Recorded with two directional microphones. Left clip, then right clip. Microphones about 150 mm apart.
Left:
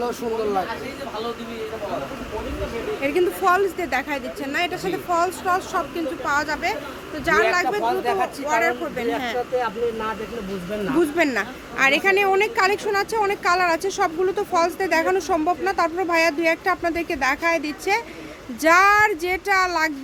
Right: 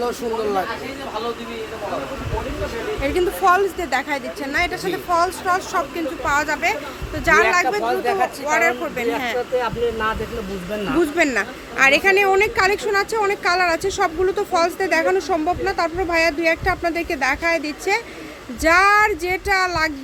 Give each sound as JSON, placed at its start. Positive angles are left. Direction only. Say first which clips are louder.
{"t": 0.0, "sound": "a woman's voice", "louder": "right 2 dB", "side_deg": 10}
{"t": 3.0, "sound": "a woman's voice", "louder": "right 2 dB", "side_deg": 10}
{"t": 8.0, "sound": "speech", "louder": "right 3 dB", "side_deg": 20}
{"t": 8.4, "sound": "a woman's voice", "louder": "right 2 dB", "side_deg": -5}